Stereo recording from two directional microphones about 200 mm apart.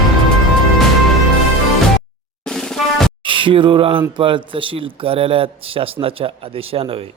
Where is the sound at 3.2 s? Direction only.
25° right (ahead or behind).